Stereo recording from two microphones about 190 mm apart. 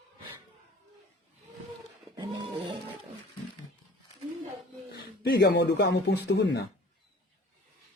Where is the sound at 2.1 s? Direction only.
25° right (ahead or behind).